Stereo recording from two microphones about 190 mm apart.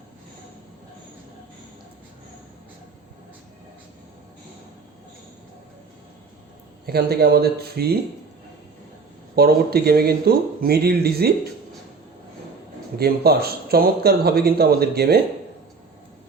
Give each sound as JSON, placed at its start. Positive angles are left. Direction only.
{"t": 6.8, "sound": "speech", "side_deg": -55}
{"t": 9.3, "sound": "speech", "side_deg": -55}
{"t": 13.0, "sound": "speech", "side_deg": -55}